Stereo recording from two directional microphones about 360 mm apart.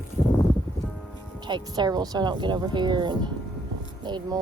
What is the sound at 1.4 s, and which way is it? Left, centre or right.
Speech, centre.